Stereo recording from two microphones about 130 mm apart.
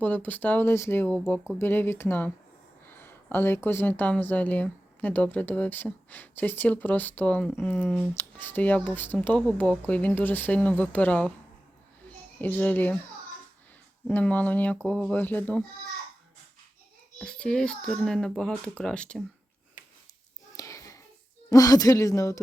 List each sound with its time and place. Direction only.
0.0 s speech: 10° left (ahead or behind)
7.9 s speech: centre (ahead or behind)
8.1 s speech: 15° left (ahead or behind)
12.4 s speech: 10° left (ahead or behind)
14.1 s speech: 10° left (ahead or behind)
17.2 s speech: 10° left (ahead or behind)
20.6 s a sound: 25° left (ahead or behind)
21.5 s speech: 25° left (ahead or behind)